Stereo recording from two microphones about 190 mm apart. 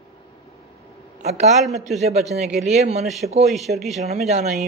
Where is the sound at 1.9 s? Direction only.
Centre (ahead or behind).